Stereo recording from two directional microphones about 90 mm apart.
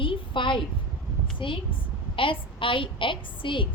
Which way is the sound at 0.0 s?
70° left (ahead or behind).